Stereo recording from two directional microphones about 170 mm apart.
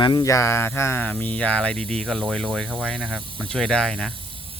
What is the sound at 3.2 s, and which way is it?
Speech, 30° right (ahead or behind).